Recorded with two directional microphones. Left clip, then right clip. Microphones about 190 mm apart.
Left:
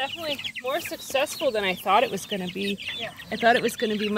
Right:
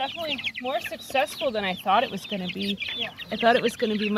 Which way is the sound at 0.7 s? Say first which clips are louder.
Left 3 dB; 40° left (ahead or behind).